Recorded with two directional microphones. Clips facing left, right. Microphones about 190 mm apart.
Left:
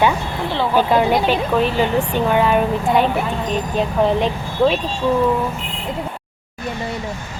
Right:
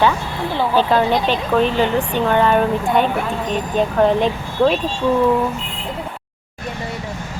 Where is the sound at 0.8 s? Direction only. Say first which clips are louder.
Left 1 dB; 10° left (ahead or behind).